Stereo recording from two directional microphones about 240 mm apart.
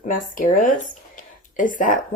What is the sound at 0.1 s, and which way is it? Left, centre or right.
Speech, left.